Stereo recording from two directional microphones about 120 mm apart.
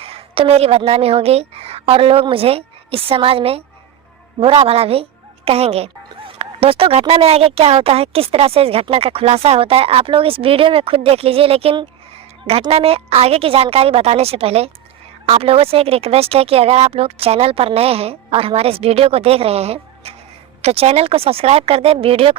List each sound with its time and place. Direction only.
0.0 s a woman's voice: 55° right (ahead or behind)